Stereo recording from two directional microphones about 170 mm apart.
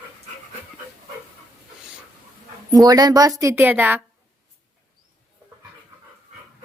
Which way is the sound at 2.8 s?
25° right (ahead or behind).